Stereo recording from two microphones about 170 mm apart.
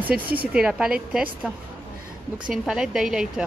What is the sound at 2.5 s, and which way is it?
Speech, 5° right (ahead or behind).